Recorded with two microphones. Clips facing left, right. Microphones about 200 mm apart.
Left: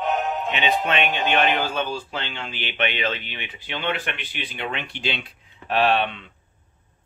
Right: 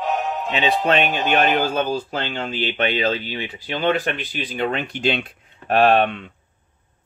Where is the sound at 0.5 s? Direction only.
35° right (ahead or behind).